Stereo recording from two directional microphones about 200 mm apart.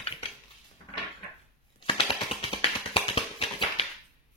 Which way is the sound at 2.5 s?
25° left (ahead or behind).